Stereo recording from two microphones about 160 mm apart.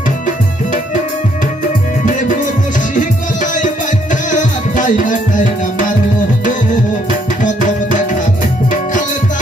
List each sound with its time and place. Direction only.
4.1 s music: 50° left (ahead or behind)